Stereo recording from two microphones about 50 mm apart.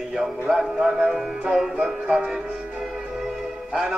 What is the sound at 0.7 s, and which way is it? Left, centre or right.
Music, centre.